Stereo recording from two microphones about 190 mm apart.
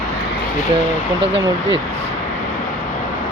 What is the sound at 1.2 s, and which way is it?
Speech, 75° right (ahead or behind).